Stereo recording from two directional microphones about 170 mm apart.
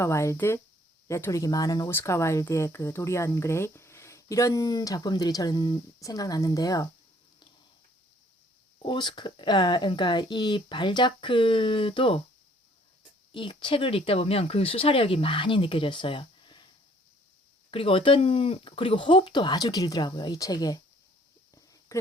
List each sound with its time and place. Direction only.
0.0 s speech: 15° left (ahead or behind)
8.8 s speech: 30° left (ahead or behind)
13.3 s speech: 30° left (ahead or behind)
17.7 s speech: 30° left (ahead or behind)
21.5 s a sound: 20° left (ahead or behind)